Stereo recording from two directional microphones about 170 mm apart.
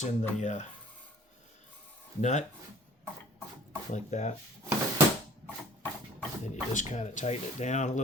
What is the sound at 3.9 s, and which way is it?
Speech, 45° left (ahead or behind).